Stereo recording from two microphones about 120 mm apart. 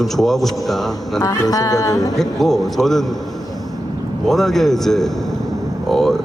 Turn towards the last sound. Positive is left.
turn(degrees=0)  # may be behind; listen again after turning